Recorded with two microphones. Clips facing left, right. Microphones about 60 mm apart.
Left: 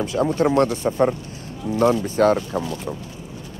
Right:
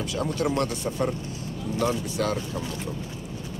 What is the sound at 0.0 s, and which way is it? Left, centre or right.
Speech, left.